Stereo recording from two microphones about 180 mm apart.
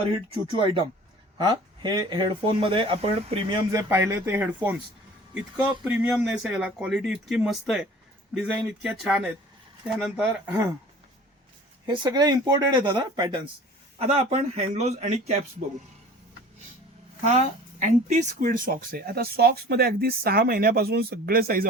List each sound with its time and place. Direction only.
0.5 s speech: 25° right (ahead or behind); by 4.8 s 10° right (ahead or behind)
5.8 s speech: 5° right (ahead or behind)
11.9 s speech: 25° right (ahead or behind)
14.0 s a man's voice: 35° right (ahead or behind)
17.2 s speech: 40° right (ahead or behind)